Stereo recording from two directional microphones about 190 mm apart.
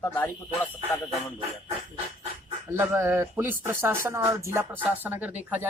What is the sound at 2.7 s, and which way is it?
Speech, 10° right (ahead or behind).